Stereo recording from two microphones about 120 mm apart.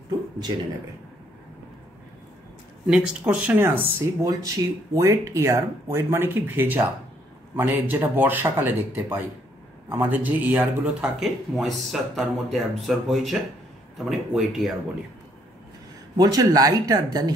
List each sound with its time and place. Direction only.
2.9 s speech: 10° right (ahead or behind)
16.2 s speech: 30° right (ahead or behind)